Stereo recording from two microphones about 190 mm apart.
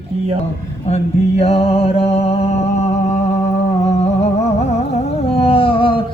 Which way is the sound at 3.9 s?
35° left (ahead or behind).